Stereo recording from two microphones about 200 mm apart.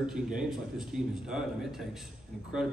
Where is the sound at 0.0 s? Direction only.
5° right (ahead or behind).